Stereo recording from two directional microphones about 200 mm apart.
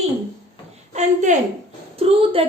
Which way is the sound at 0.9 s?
35° right (ahead or behind).